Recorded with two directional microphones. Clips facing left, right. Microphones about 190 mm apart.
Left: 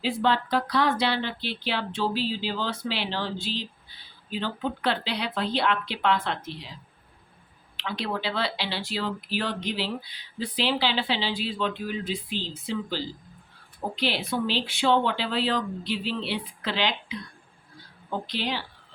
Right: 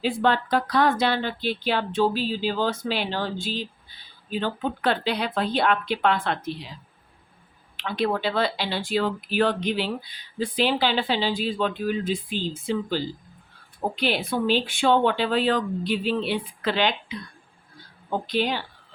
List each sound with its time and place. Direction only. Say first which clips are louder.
0.0 s speech: right 2 dB; 50° right (ahead or behind)
7.8 s speech: right 6 dB; 50° right (ahead or behind)
18.3 s speech: right 7 dB; 50° right (ahead or behind)